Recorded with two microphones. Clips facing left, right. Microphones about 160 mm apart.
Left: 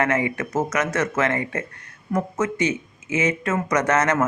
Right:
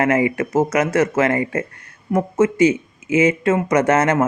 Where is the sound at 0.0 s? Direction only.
30° right (ahead or behind).